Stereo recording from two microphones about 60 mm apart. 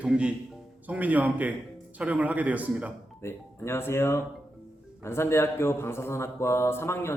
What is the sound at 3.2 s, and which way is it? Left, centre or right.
A man's voice, left.